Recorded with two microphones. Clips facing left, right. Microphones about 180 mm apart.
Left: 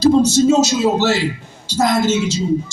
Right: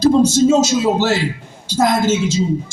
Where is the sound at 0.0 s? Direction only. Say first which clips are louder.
Even; 50° right (ahead or behind).